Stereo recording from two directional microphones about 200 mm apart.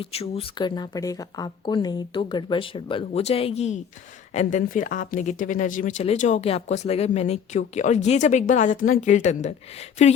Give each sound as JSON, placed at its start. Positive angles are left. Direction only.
{"t": 0.0, "sound": "speech", "side_deg": 30}